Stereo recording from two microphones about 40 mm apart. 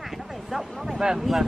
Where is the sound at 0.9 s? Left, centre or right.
Centre.